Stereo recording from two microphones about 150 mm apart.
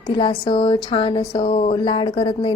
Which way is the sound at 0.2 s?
35° left (ahead or behind).